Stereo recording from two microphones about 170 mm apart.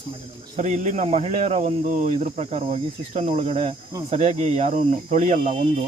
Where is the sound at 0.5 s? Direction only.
45° right (ahead or behind).